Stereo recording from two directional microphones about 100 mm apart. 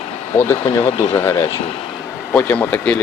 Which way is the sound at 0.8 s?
80° left.